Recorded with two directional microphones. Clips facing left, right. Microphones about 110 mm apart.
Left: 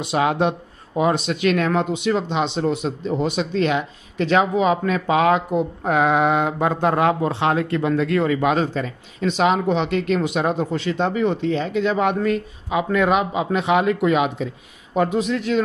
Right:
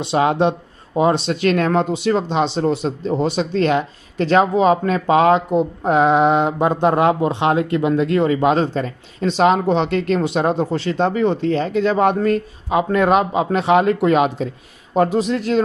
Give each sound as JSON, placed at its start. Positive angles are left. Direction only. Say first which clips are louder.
{"t": 0.0, "sound": "speech", "louder": "right 3 dB", "side_deg": -30}